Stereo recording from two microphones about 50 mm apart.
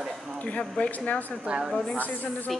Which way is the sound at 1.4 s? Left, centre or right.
Centre.